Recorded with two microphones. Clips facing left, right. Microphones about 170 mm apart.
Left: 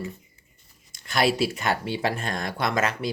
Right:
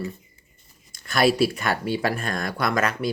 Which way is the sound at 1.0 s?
20° left (ahead or behind).